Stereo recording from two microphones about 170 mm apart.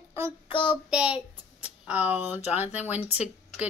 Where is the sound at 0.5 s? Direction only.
30° left (ahead or behind).